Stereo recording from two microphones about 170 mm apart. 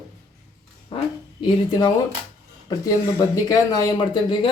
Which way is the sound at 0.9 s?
30° left (ahead or behind).